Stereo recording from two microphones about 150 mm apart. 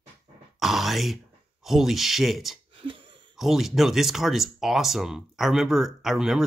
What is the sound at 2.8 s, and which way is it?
Throat clearing, 35° right (ahead or behind).